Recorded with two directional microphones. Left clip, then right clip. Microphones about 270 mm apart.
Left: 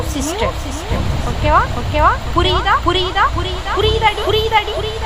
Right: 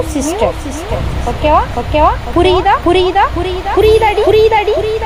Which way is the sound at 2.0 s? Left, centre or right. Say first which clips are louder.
Right 3 dB; centre.